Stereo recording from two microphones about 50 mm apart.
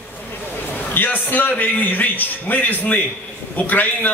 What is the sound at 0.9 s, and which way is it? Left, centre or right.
A man's voice, left.